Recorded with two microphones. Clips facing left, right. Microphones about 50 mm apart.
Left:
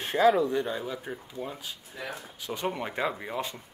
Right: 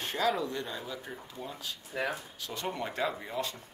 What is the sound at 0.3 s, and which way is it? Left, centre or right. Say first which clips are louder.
Speech: left 7 dB; centre.